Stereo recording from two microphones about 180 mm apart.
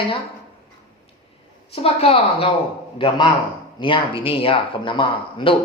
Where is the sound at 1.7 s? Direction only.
30° left (ahead or behind).